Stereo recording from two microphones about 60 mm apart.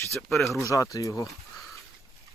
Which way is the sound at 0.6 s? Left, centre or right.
Left.